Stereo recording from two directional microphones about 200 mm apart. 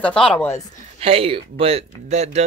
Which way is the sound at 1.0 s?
30° right (ahead or behind).